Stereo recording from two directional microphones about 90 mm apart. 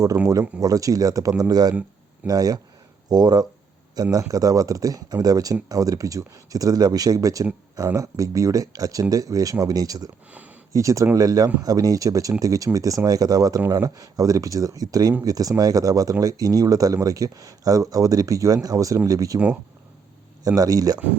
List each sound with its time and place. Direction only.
0.3 s speech: 40° right (ahead or behind)
10.3 s a sound: 15° right (ahead or behind)
10.7 s speech: 40° right (ahead or behind)
20.6 s speech: 40° right (ahead or behind)